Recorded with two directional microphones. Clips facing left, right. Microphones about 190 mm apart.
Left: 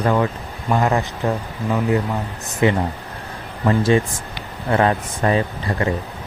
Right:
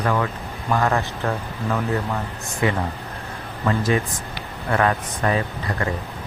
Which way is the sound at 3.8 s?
30° left (ahead or behind).